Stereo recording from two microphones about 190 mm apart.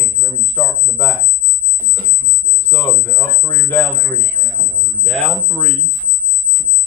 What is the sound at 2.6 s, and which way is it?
Speech, 10° left (ahead or behind).